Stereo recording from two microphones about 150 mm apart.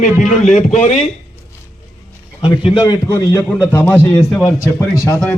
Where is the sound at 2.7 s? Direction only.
30° left (ahead or behind).